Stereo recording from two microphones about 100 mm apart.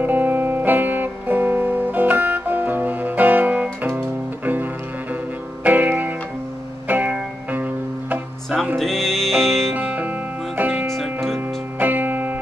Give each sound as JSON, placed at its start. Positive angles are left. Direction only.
{"t": 0.0, "sound": "music", "side_deg": -20}
{"t": 5.6, "sound": "music", "side_deg": -15}
{"t": 8.7, "sound": "music", "side_deg": 0}
{"t": 9.8, "sound": "music", "side_deg": -15}